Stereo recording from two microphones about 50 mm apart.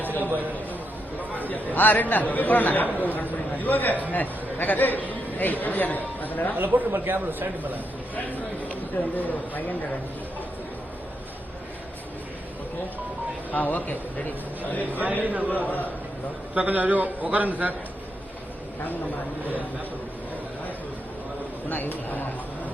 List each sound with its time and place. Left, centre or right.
0.0 s a sound: left
1.4 s speech: left
6.6 s a man's voice: right
8.1 s speech: left
13.5 s speech: left
14.8 s a man's voice: right
15.4 s speech: left
16.6 s a man's voice: right
21.7 s speech: left